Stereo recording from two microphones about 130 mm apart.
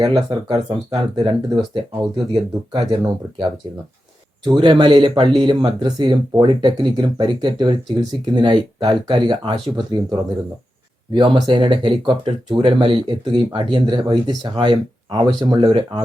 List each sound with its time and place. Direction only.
0.0 s speech: 35° right (ahead or behind)
1.2 s speech: 45° right (ahead or behind)
4.4 s speech: 35° right (ahead or behind)